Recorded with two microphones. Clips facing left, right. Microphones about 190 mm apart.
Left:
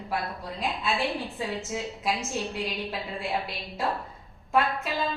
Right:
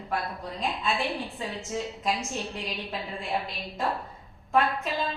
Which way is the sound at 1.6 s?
5° left (ahead or behind).